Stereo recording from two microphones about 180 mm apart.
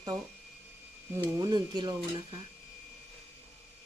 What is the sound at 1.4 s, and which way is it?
Speech, 25° right (ahead or behind).